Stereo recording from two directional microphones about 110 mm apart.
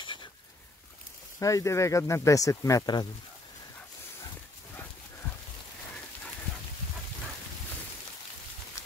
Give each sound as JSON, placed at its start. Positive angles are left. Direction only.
{"t": 0.0, "sound": "goat", "side_deg": 45}
{"t": 1.4, "sound": "speech", "side_deg": 30}